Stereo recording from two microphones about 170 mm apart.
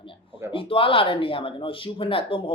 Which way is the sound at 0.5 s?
30° left (ahead or behind).